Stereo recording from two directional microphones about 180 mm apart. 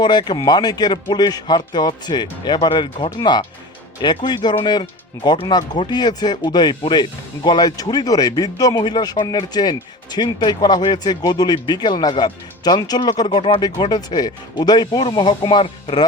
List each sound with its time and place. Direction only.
0.0 s speech: 25° left (ahead or behind)